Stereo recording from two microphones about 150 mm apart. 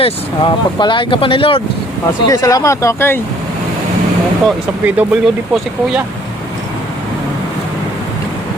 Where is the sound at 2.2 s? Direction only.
25° left (ahead or behind).